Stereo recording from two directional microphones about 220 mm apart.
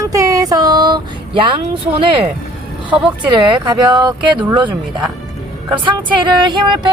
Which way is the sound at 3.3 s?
20° right (ahead or behind).